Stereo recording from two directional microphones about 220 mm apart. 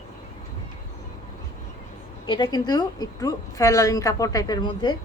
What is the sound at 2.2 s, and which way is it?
A woman's voice, 20° left (ahead or behind).